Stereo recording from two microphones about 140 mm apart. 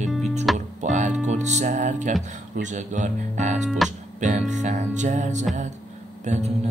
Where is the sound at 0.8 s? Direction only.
60° right (ahead or behind).